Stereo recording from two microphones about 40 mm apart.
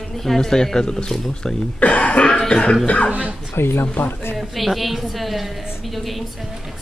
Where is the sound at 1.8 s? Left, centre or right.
Left.